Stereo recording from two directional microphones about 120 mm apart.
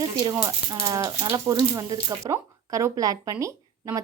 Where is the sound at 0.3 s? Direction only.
30° right (ahead or behind).